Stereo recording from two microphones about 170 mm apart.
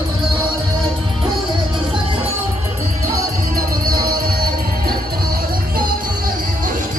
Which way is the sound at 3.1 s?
60° right (ahead or behind).